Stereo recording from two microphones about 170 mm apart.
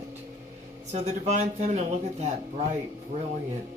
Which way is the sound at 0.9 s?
40° right (ahead or behind).